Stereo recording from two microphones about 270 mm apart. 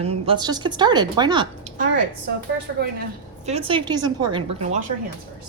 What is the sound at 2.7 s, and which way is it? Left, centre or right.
Speech, right.